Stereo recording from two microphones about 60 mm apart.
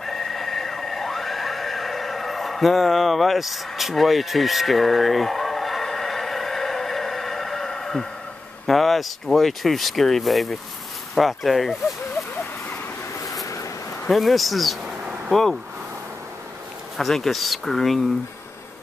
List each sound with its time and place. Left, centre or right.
0.0 s neigh: centre
8.6 s speech: centre
13.2 s vehicle: left
14.0 s speech: centre
16.9 s speech: centre